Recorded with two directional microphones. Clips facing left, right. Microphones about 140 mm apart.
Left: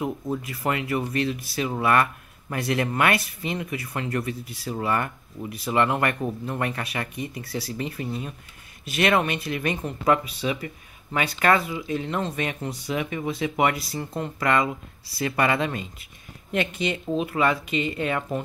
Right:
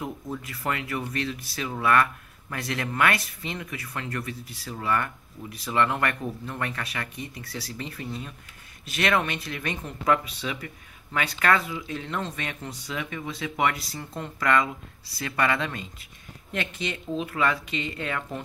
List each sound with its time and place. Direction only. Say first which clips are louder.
0.6 s speech: left 3 dB; 15° left (ahead or behind)